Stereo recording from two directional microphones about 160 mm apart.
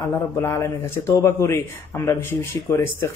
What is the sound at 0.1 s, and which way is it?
Speech, 15° left (ahead or behind).